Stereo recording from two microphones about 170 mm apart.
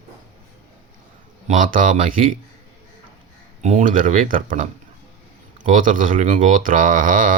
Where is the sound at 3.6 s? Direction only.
45° right (ahead or behind).